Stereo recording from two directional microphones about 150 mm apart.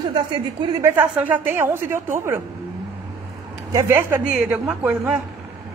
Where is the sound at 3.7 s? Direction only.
20° right (ahead or behind).